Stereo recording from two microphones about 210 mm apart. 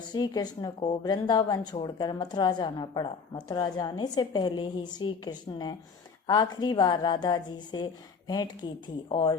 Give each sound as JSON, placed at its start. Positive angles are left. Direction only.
{"t": 0.0, "sound": "a woman's voice", "side_deg": 20}